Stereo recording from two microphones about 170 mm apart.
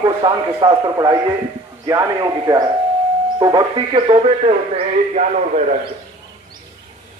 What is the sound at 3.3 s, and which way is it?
A man's voice, 25° right (ahead or behind).